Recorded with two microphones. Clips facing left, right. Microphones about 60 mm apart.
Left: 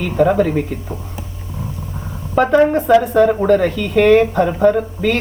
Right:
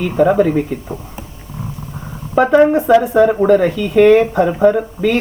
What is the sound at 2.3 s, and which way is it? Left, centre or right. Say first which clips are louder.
Speech: right 2 dB; centre.